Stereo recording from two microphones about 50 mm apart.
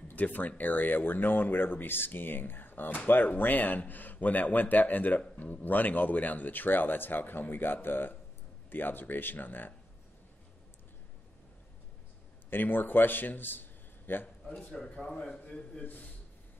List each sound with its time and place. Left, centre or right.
0.1 s speech: left
12.4 s a man's voice: left
14.7 s speech: centre
15.1 s a man's voice: left
15.8 s speech: left